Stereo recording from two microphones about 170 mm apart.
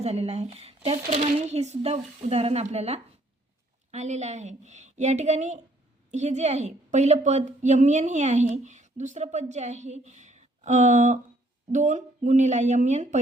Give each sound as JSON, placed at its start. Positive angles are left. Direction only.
{"t": 0.0, "sound": "a woman's voice", "side_deg": -40}